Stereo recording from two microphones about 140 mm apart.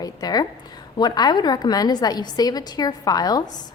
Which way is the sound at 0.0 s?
30° left (ahead or behind).